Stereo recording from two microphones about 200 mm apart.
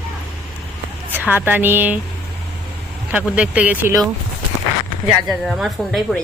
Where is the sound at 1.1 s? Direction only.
10° right (ahead or behind).